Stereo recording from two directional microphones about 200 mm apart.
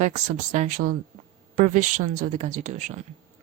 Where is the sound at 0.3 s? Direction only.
40° right (ahead or behind).